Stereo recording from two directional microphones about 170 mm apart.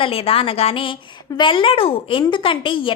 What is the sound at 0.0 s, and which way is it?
A woman's voice, 35° left (ahead or behind).